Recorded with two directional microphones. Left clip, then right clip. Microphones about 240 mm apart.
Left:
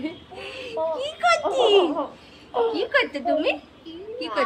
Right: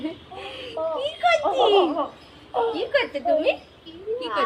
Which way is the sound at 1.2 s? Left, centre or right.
Centre.